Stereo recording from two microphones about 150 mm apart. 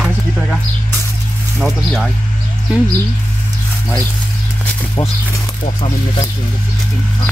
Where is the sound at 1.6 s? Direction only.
Centre (ahead or behind).